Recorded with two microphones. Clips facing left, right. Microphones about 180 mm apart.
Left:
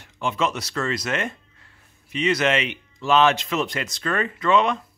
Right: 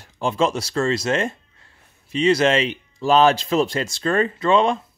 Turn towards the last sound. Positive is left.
turn(degrees=-30)  # may be behind; listen again after turning